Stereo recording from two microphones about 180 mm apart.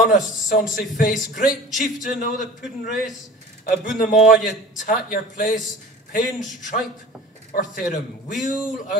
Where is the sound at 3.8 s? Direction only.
45° left (ahead or behind).